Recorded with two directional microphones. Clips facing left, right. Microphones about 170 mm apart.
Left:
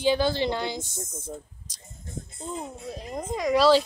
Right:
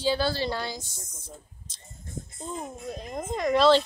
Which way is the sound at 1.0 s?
50° left (ahead or behind).